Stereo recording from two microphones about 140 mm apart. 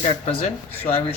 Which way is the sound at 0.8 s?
45° left (ahead or behind).